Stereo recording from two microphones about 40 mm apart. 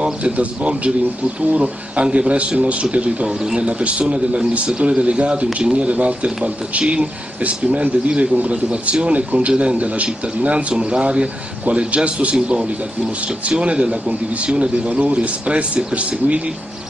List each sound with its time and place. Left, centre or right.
0.0 s speech: right
3.3 s a man's voice: centre
3.6 s speech: right
12.4 s speech: right